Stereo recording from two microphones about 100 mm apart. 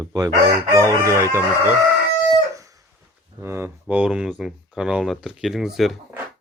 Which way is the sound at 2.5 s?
35° right (ahead or behind).